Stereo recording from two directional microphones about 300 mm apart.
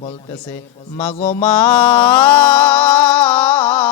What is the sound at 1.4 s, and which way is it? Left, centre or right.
Music, centre.